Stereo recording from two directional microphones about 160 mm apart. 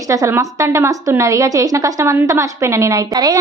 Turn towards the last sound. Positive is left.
turn(degrees=-25)  # may be behind; listen again after turning